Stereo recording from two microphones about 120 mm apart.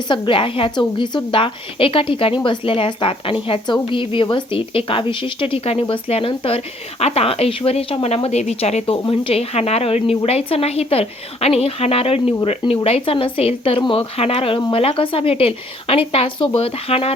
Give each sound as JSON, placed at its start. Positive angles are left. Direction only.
{"t": 0.1, "sound": "a woman's voice", "side_deg": 45}